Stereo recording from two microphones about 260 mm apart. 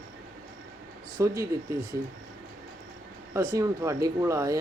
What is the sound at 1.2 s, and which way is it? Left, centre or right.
Speech, centre.